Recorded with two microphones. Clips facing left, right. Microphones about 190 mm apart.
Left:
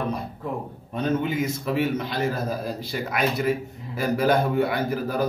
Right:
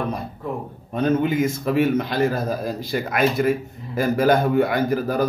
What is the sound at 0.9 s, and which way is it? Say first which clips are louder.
A man's voice: right 5 dB; 50° right (ahead or behind).